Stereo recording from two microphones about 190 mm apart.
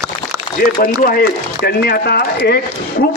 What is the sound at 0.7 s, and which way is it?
A man's voice, 50° left (ahead or behind).